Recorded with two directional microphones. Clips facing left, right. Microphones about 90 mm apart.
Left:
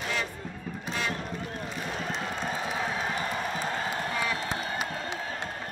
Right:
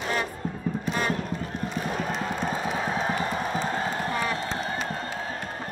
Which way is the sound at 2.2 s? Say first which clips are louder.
Right 4 dB; 35° right (ahead or behind).